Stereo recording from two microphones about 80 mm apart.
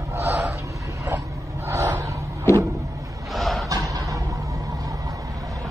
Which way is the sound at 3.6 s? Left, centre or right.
Right.